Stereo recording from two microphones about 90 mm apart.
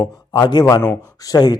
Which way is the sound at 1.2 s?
45° left (ahead or behind).